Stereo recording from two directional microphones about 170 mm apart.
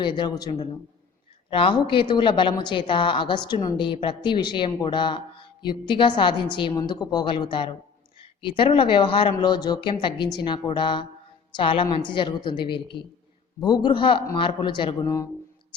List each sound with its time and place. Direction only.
0.0 s a woman's voice: 25° left (ahead or behind)